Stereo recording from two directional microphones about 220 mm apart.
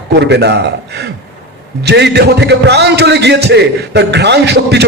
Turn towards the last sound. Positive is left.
turn(degrees=-50)  # may be behind; listen again after turning